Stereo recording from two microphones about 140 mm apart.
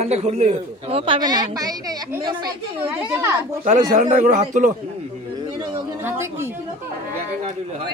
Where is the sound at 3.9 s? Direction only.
70° right (ahead or behind).